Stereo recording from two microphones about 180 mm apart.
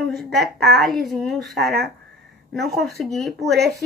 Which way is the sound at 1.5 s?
65° right (ahead or behind).